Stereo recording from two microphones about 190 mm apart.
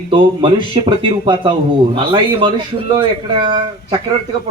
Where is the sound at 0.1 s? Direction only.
25° right (ahead or behind).